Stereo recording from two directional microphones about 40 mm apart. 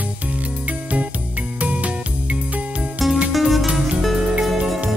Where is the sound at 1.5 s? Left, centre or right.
Right.